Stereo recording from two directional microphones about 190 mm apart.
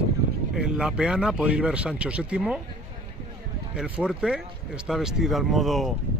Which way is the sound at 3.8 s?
5° right (ahead or behind).